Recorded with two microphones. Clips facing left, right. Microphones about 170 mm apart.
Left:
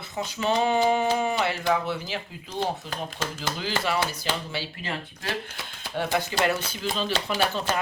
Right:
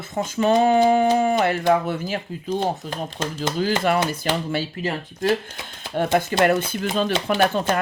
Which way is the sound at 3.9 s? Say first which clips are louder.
Right 6 dB; 55° right (ahead or behind).